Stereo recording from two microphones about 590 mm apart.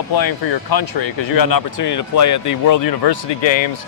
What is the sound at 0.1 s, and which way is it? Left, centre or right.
Speech, left.